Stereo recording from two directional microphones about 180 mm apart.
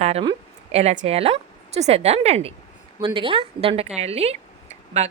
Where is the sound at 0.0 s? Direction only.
35° right (ahead or behind).